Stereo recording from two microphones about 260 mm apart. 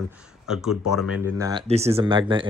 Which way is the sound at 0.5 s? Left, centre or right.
Centre.